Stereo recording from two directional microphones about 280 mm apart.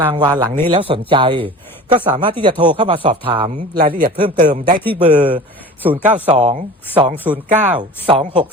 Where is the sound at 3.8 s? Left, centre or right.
Right.